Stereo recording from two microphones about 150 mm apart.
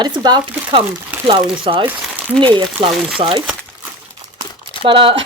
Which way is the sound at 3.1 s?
35° right (ahead or behind).